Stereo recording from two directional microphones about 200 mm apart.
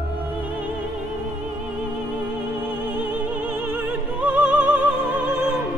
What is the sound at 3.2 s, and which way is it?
Opera, 10° right (ahead or behind).